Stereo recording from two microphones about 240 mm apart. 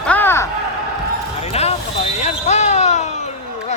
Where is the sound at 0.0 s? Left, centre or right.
Centre.